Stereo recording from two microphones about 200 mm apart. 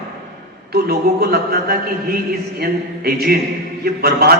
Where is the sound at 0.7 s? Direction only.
50° right (ahead or behind).